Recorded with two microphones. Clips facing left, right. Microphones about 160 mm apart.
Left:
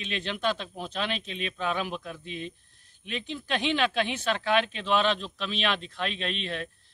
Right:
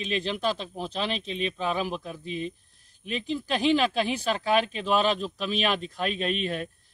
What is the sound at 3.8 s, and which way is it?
Speech, 35° right (ahead or behind).